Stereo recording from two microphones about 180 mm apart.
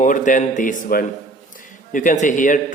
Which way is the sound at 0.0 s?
45° left (ahead or behind).